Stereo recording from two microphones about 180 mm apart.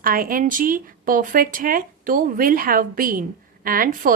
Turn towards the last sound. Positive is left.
turn(degrees=-50)  # may be behind; listen again after turning